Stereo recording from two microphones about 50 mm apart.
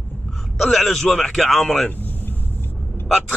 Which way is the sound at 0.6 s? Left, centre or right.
Centre.